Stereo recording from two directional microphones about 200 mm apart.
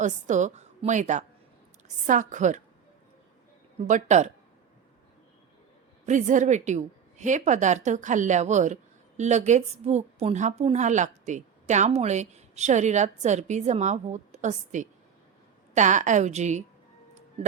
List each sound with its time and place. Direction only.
0.0 s a woman's voice: 35° right (ahead or behind)
3.8 s a woman's voice: 35° right (ahead or behind)
6.1 s a woman's voice: 40° right (ahead or behind)